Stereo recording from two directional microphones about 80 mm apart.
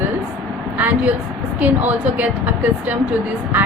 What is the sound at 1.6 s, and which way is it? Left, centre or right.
Speech, right.